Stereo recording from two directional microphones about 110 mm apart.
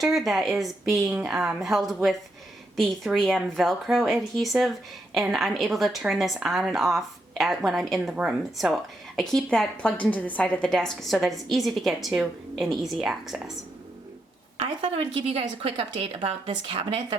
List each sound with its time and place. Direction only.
0.0 s a woman's voice: centre (ahead or behind)
14.8 s speech: 60° right (ahead or behind)